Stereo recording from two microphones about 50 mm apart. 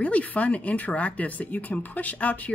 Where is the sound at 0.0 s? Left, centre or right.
Left.